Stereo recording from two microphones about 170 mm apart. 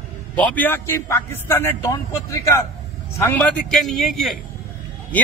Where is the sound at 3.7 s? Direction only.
Centre (ahead or behind).